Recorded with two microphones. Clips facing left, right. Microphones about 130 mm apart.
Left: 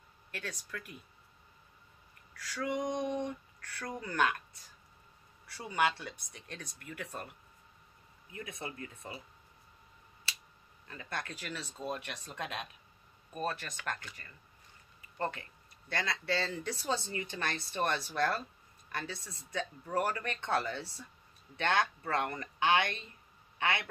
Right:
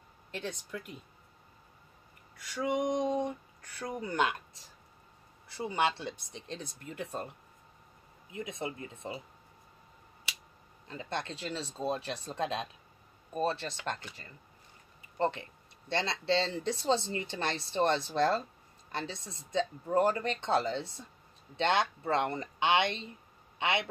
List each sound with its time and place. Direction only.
0.3 s speech: 20° right (ahead or behind)
2.3 s speech: 20° right (ahead or behind)
5.5 s speech: 25° right (ahead or behind)
10.9 s speech: 25° right (ahead or behind)